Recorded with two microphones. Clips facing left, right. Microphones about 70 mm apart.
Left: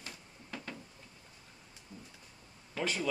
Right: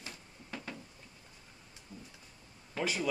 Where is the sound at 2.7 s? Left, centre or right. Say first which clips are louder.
Right 1 dB; centre.